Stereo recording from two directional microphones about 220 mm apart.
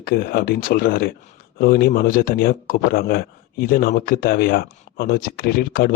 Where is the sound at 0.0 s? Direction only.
45° left (ahead or behind).